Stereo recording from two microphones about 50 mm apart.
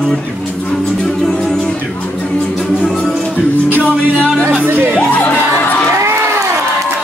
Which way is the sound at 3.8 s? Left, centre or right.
Right.